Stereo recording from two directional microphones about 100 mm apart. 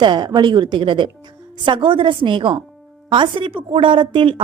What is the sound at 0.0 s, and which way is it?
A woman's voice, 45° right (ahead or behind).